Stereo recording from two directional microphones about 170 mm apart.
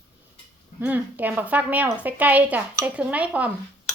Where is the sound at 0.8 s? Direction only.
10° right (ahead or behind).